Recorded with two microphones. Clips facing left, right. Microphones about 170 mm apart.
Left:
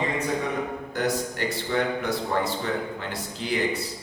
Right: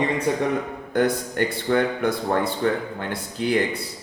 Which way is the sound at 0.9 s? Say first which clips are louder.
Right 7 dB; 55° right (ahead or behind).